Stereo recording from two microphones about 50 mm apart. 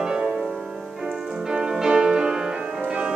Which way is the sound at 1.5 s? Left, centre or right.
Centre.